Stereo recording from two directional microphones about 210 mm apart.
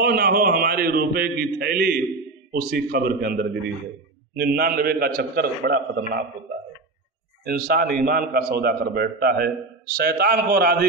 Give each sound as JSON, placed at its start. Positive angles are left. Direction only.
{"t": 0.0, "sound": "a man's voice", "side_deg": -45}
{"t": 7.4, "sound": "a man's voice", "side_deg": -45}